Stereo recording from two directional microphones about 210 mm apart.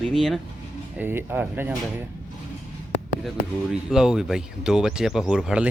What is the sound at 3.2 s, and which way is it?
Speech, centre (ahead or behind).